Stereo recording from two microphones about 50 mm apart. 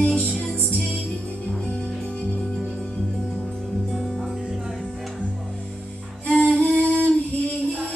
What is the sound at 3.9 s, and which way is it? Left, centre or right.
Music, centre.